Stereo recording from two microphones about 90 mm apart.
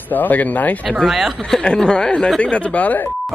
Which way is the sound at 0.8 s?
Centre (ahead or behind).